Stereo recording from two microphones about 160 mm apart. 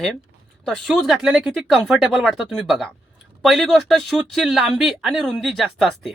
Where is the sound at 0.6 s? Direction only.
Centre (ahead or behind).